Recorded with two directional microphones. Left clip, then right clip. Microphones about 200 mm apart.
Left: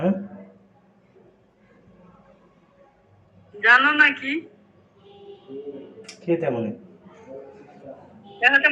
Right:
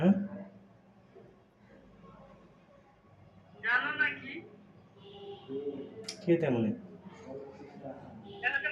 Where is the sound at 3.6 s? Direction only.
40° left (ahead or behind).